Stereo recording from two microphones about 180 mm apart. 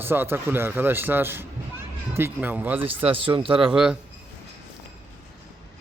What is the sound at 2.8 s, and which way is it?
Speech, 30° right (ahead or behind).